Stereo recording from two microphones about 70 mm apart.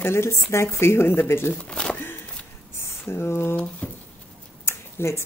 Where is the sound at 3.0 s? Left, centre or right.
Left.